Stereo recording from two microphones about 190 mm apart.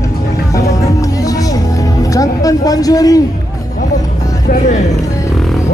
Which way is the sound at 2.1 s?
20° left (ahead or behind).